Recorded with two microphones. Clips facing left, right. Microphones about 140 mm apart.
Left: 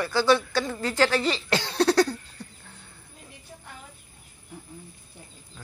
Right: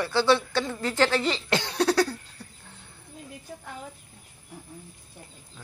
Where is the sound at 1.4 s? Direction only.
15° right (ahead or behind).